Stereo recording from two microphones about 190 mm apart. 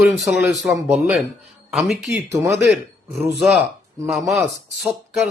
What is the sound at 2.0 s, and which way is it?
Speech, 15° right (ahead or behind).